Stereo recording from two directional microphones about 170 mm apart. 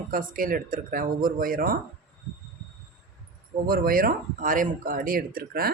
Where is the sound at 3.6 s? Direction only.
55° right (ahead or behind).